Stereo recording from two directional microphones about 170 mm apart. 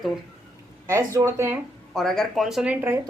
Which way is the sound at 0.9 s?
15° right (ahead or behind).